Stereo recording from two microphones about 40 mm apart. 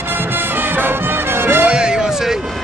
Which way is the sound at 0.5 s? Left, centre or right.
Right.